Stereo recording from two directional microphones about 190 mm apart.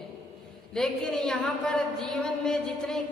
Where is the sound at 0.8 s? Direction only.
5° left (ahead or behind).